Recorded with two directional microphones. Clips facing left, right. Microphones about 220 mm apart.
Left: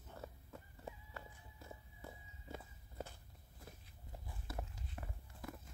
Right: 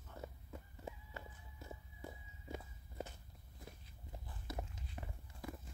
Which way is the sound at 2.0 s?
15° right (ahead or behind).